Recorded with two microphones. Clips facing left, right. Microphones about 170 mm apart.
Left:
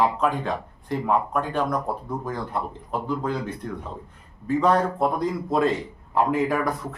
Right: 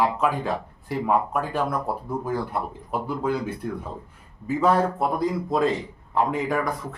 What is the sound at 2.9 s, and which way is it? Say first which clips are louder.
Speech: right 1 dB; 10° right (ahead or behind).